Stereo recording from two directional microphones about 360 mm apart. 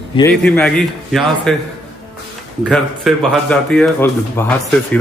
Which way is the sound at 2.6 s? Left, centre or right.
Centre.